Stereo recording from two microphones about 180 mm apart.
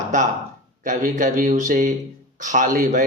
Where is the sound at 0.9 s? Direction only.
45° right (ahead or behind).